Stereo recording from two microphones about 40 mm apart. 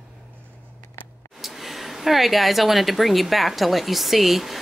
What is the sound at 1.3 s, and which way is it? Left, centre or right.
Speech, centre.